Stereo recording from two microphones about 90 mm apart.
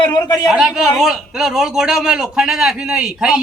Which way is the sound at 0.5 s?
5° right (ahead or behind).